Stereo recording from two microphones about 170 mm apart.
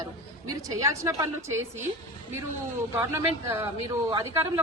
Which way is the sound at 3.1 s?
15° right (ahead or behind).